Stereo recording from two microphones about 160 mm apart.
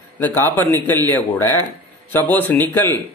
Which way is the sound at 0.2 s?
10° left (ahead or behind).